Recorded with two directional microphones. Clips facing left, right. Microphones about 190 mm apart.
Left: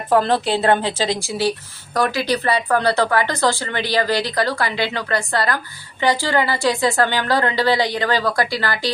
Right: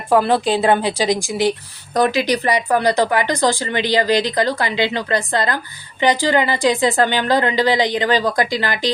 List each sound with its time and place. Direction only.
0.1 s a woman's voice: 10° right (ahead or behind)